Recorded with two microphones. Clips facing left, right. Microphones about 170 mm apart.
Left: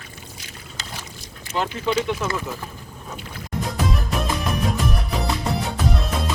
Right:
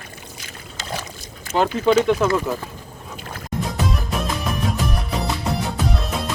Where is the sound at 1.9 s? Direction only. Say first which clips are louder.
Right 6 dB; 50° right (ahead or behind).